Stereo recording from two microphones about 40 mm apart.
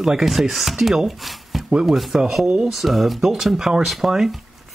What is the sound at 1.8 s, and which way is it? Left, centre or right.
Speech, centre.